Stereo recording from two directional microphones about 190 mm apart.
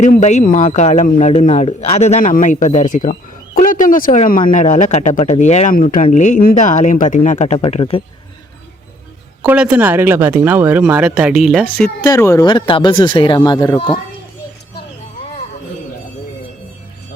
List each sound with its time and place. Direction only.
0.0 s speech: 40° left (ahead or behind)
9.5 s speech: 5° right (ahead or behind)
12.0 s speech: 15° left (ahead or behind)